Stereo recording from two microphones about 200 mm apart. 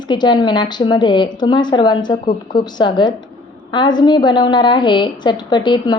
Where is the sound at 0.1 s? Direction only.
20° left (ahead or behind).